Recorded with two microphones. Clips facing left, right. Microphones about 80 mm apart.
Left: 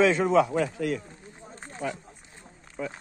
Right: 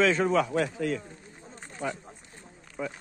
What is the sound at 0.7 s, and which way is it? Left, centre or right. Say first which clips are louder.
A man's voice: left 1 dB; centre.